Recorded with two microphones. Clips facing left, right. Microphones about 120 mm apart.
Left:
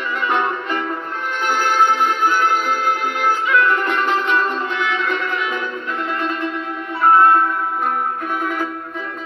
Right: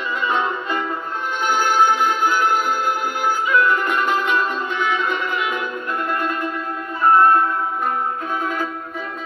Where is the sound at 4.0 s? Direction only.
10° right (ahead or behind).